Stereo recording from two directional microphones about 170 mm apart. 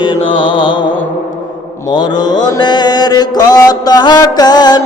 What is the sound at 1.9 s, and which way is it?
Mantra, 25° left (ahead or behind).